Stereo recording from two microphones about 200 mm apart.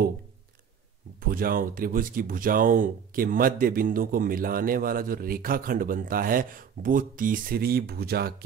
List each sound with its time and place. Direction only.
1.2 s speech: 45° right (ahead or behind)